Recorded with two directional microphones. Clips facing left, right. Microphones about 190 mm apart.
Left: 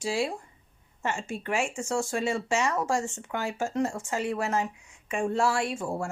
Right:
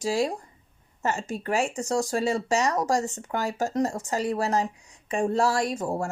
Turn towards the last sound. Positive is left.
turn(degrees=-40)  # may be behind; listen again after turning